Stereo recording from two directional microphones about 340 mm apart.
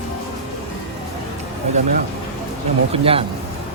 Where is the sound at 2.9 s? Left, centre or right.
Centre.